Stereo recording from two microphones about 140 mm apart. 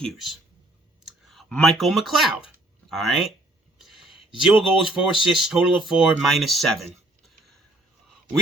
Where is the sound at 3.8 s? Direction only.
Centre (ahead or behind).